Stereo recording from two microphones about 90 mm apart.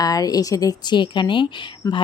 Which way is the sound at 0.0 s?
45° left (ahead or behind).